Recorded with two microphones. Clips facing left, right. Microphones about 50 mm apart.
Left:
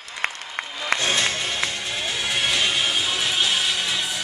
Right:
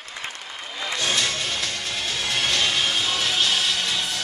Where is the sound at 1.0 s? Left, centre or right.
Left.